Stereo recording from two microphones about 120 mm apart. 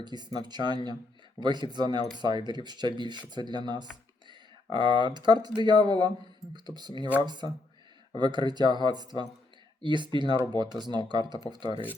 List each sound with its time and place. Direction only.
0.0 s speech: 35° right (ahead or behind)
8.1 s speech: 40° right (ahead or behind)